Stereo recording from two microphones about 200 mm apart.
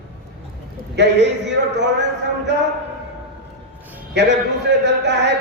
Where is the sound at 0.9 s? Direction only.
60° right (ahead or behind).